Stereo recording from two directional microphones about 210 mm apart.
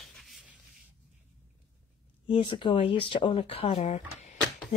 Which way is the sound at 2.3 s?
25° left (ahead or behind).